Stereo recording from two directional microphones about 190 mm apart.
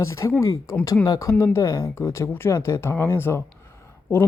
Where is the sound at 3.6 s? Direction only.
15° left (ahead or behind).